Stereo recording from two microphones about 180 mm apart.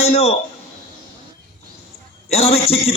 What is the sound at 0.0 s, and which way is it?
Speech, 35° left (ahead or behind).